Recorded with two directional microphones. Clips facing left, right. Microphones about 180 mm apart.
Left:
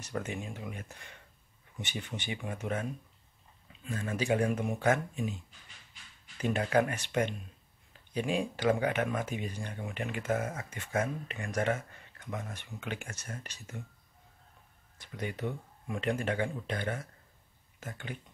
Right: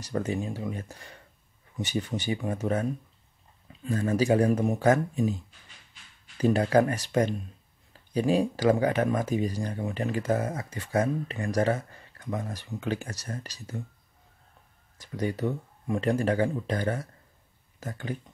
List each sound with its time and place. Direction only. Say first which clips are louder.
0.0 s speech: right 7 dB; 35° right (ahead or behind)
15.0 s speech: right 8 dB; 40° right (ahead or behind)